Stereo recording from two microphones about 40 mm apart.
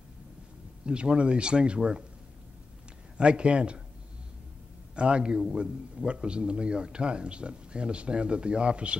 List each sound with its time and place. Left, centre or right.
0.8 s a man's voice: right
3.2 s a man's voice: right
4.9 s a man's voice: right